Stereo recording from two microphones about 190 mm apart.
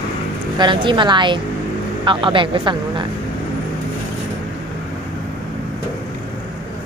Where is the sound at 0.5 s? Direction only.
25° right (ahead or behind).